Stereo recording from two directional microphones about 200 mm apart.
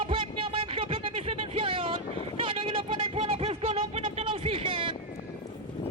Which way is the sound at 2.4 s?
25° right (ahead or behind).